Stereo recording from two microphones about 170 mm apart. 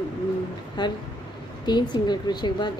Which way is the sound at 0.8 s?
25° left (ahead or behind).